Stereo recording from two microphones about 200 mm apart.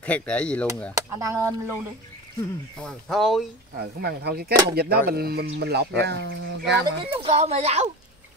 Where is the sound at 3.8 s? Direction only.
50° right (ahead or behind).